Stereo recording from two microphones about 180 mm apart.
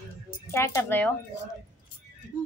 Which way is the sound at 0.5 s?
15° left (ahead or behind).